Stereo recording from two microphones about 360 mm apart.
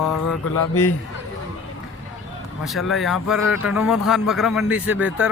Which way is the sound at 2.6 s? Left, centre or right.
Centre.